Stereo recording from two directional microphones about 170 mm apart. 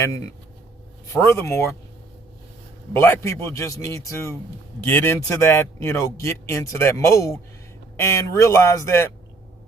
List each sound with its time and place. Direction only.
1.1 s a man's voice: 15° left (ahead or behind)
2.9 s a man's voice: 15° left (ahead or behind)